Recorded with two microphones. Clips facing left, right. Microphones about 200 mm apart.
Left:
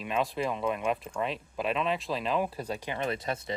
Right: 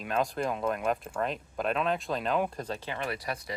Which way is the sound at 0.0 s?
Centre (ahead or behind).